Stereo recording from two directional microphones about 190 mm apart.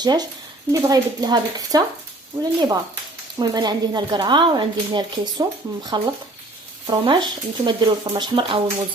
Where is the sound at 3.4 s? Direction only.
20° right (ahead or behind).